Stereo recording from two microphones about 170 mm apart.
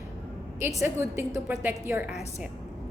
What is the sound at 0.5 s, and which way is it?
A woman's voice, 15° right (ahead or behind).